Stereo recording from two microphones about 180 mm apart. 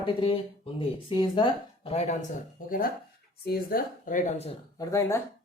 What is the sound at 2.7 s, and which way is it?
Speech, 55° left (ahead or behind).